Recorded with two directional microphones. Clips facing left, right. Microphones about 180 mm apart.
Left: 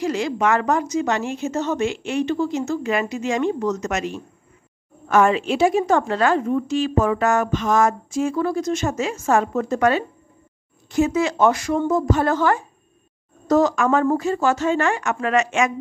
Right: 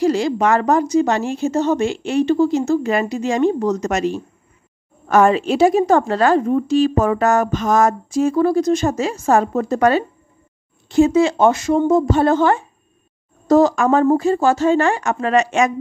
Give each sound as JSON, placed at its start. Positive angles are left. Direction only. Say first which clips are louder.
{"t": 0.0, "sound": "a woman's voice", "louder": "right 5 dB", "side_deg": -35}